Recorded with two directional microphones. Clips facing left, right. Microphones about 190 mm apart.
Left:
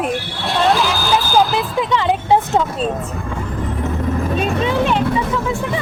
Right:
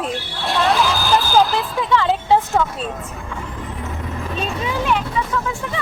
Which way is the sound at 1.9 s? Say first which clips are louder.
Even; 20° left (ahead or behind).